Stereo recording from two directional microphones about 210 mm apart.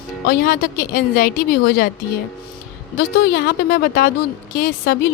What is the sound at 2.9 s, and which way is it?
A woman's voice, 50° left (ahead or behind).